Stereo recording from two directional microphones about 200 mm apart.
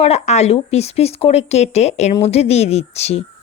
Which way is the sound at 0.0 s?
35° left (ahead or behind).